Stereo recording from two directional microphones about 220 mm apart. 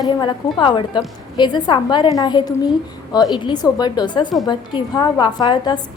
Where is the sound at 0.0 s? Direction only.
20° left (ahead or behind).